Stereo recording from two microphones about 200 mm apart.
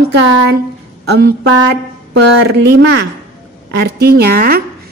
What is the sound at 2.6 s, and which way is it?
A woman's voice, 60° right (ahead or behind).